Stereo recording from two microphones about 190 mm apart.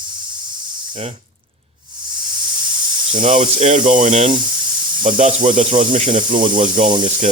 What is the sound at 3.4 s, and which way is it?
Speech, 40° right (ahead or behind).